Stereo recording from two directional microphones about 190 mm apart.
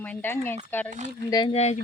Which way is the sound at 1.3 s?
20° left (ahead or behind).